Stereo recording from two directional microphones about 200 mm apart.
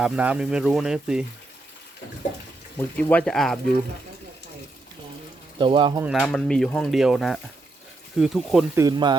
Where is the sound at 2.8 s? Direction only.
10° left (ahead or behind).